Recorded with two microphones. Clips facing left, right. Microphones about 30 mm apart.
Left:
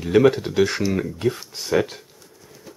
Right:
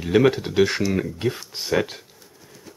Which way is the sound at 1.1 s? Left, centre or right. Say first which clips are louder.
Left 2 dB; centre.